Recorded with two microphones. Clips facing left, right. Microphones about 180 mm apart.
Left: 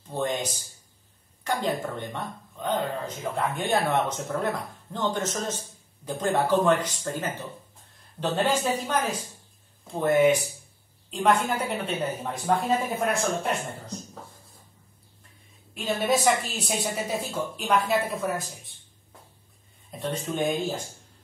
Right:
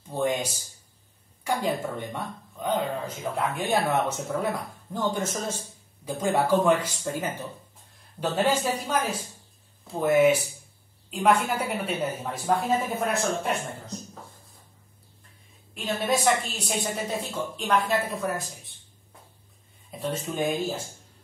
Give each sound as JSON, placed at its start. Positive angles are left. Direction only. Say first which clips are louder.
{"t": 0.1, "sound": "a man's voice", "louder": "right 2 dB", "side_deg": -10}
{"t": 15.7, "sound": "a woman's voice", "louder": "left 2 dB", "side_deg": 0}
{"t": 19.9, "sound": "a woman's voice", "louder": "even", "side_deg": -5}